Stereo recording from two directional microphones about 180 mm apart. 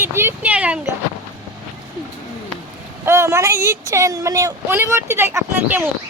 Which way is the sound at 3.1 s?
15° right (ahead or behind).